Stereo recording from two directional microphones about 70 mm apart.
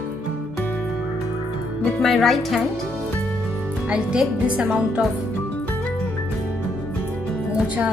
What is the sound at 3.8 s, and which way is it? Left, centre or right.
Speech, centre.